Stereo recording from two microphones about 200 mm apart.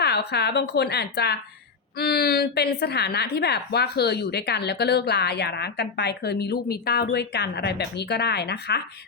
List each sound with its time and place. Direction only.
0.0 s a woman's voice: 55° left (ahead or behind)